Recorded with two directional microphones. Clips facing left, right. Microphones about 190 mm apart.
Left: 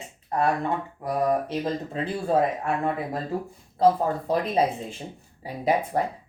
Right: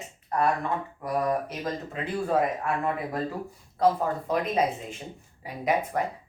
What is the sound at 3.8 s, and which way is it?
Speech, 30° left (ahead or behind).